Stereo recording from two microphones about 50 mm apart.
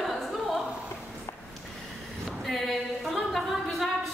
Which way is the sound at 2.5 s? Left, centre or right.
Centre.